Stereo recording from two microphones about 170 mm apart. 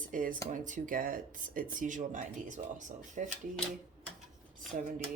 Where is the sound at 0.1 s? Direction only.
50° right (ahead or behind).